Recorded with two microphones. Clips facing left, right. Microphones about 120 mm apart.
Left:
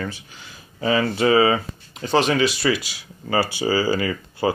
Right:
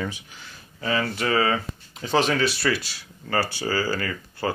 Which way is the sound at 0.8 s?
20° left (ahead or behind).